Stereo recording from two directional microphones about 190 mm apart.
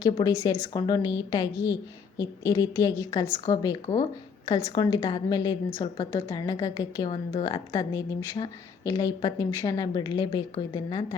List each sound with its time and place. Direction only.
0.0 s a woman's voice: 20° left (ahead or behind)